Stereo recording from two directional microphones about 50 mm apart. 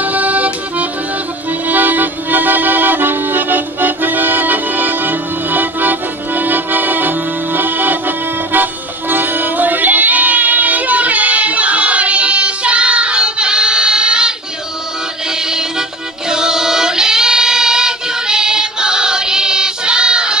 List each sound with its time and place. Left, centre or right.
0.0 s music: right
9.1 s music: right; by 14.3 s centre
15.3 s music: centre
16.3 s choir: centre